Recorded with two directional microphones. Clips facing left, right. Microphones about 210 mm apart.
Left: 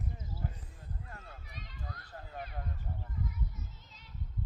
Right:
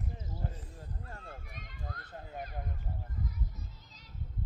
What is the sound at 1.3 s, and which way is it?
Run, 50° right (ahead or behind).